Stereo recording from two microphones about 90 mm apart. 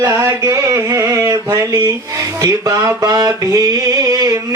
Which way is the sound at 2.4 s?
45° right (ahead or behind).